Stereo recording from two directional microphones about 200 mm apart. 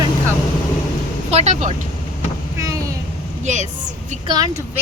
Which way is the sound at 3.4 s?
35° right (ahead or behind).